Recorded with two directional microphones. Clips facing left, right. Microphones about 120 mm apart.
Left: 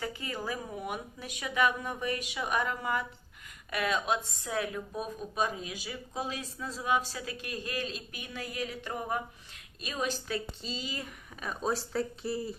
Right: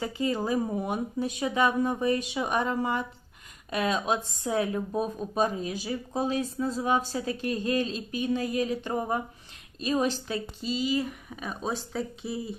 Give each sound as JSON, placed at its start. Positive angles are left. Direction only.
{"t": 0.0, "sound": "a woman's voice", "side_deg": -25}
{"t": 11.9, "sound": "speech", "side_deg": 0}